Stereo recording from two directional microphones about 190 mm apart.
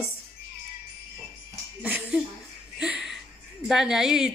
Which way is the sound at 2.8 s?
5° right (ahead or behind).